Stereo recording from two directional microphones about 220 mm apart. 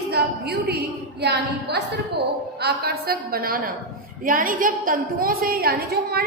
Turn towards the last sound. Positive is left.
turn(degrees=-45)  # may be behind; listen again after turning